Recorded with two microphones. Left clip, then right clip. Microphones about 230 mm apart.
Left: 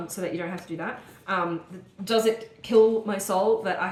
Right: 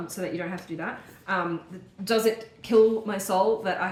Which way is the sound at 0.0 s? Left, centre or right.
Centre.